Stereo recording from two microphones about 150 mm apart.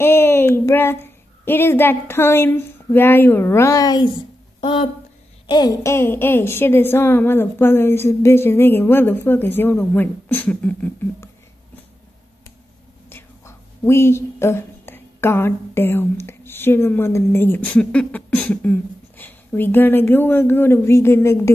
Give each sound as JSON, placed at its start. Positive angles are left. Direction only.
{"t": 0.0, "sound": "a woman's voice", "side_deg": 15}
{"t": 13.1, "sound": "speech", "side_deg": 15}